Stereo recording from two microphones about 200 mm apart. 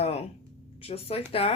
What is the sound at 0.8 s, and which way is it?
Speech, 30° left (ahead or behind).